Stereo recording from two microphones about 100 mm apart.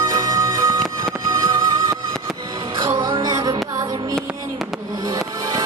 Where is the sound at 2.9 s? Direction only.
40° right (ahead or behind).